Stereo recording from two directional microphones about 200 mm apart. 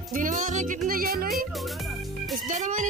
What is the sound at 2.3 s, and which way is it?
Music, 40° right (ahead or behind).